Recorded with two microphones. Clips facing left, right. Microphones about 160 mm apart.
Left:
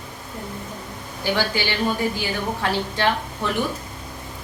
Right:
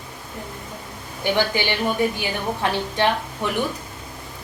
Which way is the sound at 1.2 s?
20° right (ahead or behind).